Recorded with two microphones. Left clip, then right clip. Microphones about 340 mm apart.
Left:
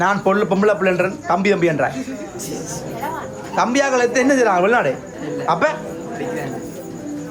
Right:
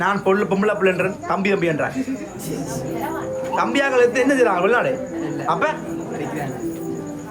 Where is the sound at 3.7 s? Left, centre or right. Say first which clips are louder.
Right 1 dB; centre.